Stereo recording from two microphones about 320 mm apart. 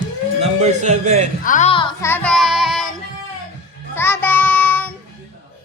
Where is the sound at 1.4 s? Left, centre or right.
Left; by 2.9 s centre.